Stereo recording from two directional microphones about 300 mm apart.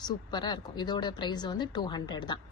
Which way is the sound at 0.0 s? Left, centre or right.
Centre.